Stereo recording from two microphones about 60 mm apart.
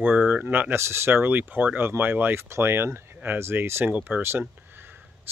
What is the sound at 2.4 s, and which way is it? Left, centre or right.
Speech, right.